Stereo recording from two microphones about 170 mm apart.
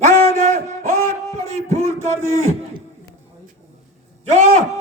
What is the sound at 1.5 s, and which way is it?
Speech, 40° right (ahead or behind).